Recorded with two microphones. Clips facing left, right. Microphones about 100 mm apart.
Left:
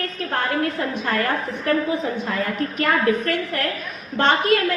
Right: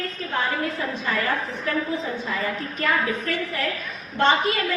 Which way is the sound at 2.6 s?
70° left (ahead or behind).